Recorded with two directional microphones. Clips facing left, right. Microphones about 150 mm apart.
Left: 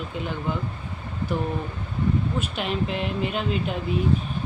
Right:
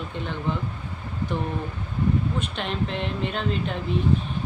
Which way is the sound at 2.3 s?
5° left (ahead or behind).